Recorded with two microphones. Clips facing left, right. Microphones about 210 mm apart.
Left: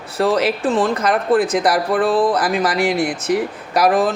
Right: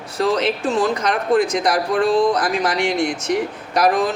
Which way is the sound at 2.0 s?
35° left (ahead or behind).